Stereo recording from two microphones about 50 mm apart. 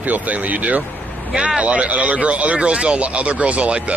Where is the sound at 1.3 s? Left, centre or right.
Right.